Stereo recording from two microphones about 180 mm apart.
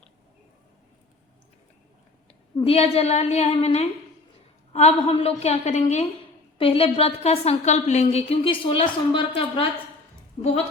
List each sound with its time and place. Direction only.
2.6 s a woman's voice: 35° left (ahead or behind)